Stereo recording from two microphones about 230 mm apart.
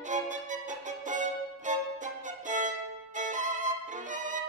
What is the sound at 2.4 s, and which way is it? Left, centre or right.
Violin, right.